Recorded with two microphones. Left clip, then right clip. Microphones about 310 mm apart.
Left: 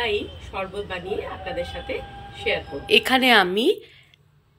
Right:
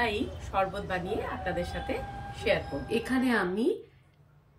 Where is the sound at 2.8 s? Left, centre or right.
Centre.